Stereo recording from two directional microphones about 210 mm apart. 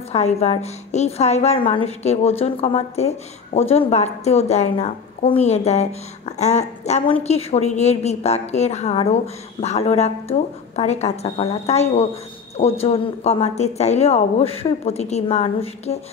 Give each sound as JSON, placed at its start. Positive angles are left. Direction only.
{"t": 0.1, "sound": "a woman's voice", "side_deg": 30}